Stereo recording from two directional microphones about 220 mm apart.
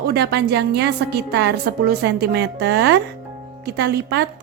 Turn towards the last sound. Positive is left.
turn(degrees=-50)  # may be behind; listen again after turning